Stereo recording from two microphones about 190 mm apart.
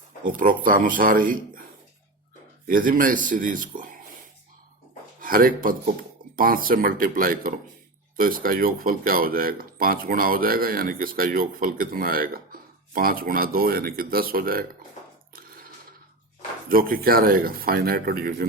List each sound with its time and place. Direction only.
0.3 s speech: 45° right (ahead or behind)
2.6 s speech: 45° right (ahead or behind)
5.2 s speech: 50° right (ahead or behind)
16.6 s speech: 50° right (ahead or behind)